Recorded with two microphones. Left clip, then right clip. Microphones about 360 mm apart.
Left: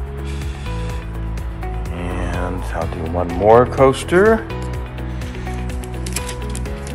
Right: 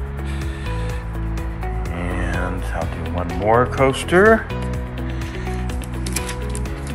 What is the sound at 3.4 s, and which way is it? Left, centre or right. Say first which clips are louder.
Speech: left 5 dB; left.